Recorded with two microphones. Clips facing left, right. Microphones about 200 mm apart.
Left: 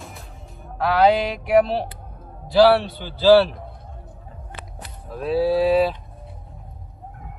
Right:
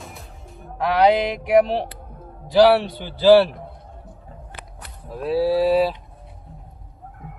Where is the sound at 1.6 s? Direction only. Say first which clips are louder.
Right 1 dB; 15° right (ahead or behind).